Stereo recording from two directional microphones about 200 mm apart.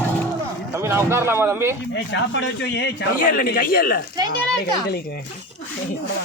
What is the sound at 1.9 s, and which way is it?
A man's voice, 60° left (ahead or behind).